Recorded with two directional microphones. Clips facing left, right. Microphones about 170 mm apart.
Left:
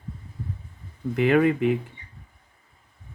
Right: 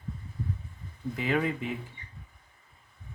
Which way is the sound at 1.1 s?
65° left (ahead or behind).